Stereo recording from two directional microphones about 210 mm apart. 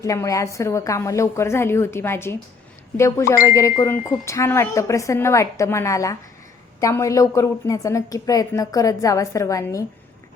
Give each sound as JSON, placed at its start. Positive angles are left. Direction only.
{"t": 0.0, "sound": "a woman's voice", "side_deg": 15}